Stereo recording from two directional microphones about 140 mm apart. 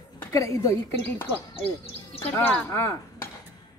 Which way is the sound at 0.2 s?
20° left (ahead or behind).